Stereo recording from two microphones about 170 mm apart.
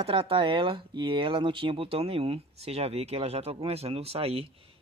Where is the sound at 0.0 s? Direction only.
30° right (ahead or behind).